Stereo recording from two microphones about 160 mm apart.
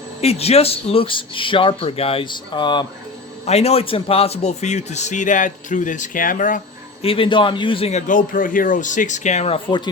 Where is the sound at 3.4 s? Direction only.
40° left (ahead or behind); by 6.6 s 55° left (ahead or behind).